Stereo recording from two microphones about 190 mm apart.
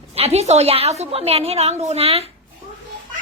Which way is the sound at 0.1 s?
30° right (ahead or behind).